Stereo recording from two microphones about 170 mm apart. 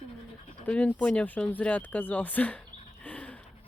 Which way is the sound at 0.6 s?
10° left (ahead or behind).